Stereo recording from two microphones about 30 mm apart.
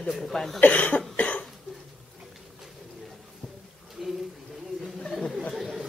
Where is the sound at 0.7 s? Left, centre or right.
Left.